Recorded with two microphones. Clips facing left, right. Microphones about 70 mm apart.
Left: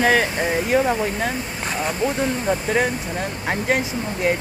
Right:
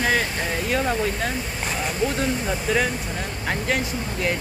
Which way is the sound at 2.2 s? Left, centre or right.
Left.